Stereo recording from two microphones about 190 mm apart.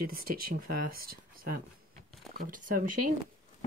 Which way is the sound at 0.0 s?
50° right (ahead or behind).